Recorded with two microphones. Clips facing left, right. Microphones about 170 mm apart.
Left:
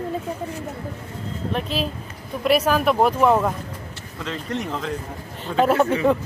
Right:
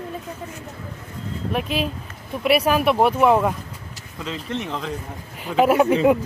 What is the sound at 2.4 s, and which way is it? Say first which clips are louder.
Speech: even; 10° right (ahead or behind).